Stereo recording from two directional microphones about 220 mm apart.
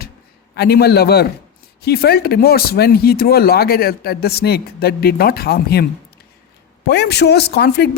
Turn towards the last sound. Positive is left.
turn(degrees=50)  # may be behind; listen again after turning